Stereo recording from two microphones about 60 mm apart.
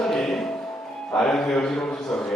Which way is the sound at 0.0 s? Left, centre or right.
Centre.